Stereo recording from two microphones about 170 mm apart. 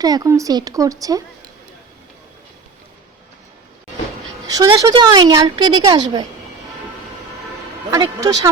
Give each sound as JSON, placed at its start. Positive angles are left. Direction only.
{"t": 0.0, "sound": "a woman's voice", "side_deg": -20}
{"t": 4.4, "sound": "a woman's voice", "side_deg": -20}
{"t": 7.9, "sound": "a woman's voice", "side_deg": -20}